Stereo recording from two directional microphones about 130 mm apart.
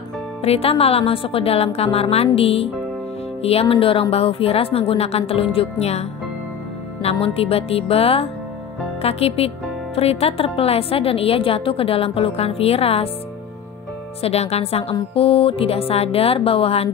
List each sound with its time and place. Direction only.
0.4 s a woman's voice: 50° left (ahead or behind)
14.2 s a woman's voice: 50° left (ahead or behind)